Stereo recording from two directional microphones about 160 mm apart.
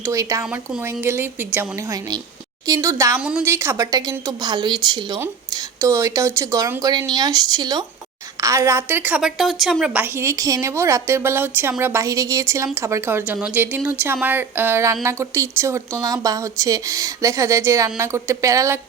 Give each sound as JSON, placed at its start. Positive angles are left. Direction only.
{"t": 0.0, "sound": "speech", "side_deg": -20}
{"t": 0.4, "sound": "a woman's voice", "side_deg": -10}
{"t": 3.2, "sound": "a woman's voice", "side_deg": -5}